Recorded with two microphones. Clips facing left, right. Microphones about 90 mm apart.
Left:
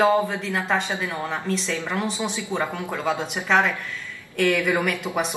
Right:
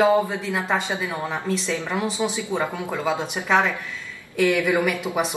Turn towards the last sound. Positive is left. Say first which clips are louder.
# right 1 dB
turn(degrees=-15)  # may be behind; listen again after turning